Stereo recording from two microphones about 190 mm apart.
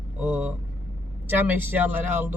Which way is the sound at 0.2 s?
10° right (ahead or behind).